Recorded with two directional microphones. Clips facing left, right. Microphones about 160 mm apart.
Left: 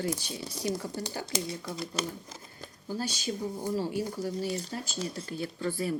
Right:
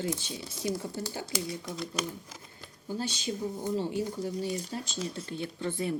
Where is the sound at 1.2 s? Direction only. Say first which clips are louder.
Left 1 dB; 20° left (ahead or behind).